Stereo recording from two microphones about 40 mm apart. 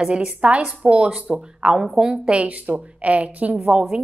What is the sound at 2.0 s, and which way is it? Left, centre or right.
Speech, right.